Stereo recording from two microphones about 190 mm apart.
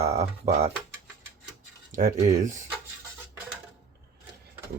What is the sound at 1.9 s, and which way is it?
Speech, 40° right (ahead or behind).